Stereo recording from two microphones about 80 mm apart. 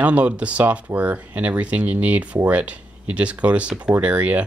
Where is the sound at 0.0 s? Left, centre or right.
Centre.